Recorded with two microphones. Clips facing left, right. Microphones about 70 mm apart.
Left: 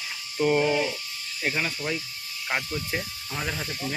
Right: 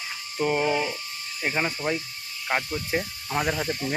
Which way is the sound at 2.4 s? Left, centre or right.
Centre.